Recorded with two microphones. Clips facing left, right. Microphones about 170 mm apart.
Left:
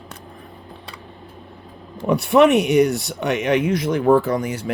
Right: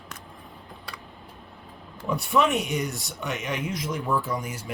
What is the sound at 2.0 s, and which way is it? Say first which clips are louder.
Speech: left 9 dB; 70° left (ahead or behind).